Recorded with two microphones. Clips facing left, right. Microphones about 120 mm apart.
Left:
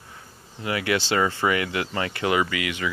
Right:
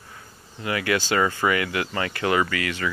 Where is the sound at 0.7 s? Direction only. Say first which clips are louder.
Even; 25° left (ahead or behind).